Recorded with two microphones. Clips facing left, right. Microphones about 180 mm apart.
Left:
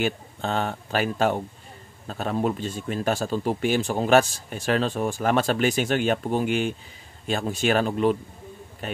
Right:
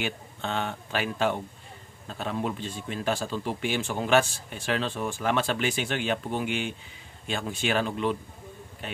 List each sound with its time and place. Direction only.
0.0 s a man's voice: 40° left (ahead or behind)